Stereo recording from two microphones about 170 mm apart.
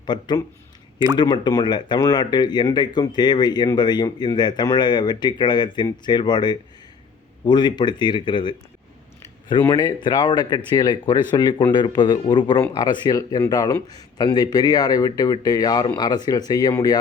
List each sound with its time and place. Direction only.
0.0 s speech: 25° left (ahead or behind)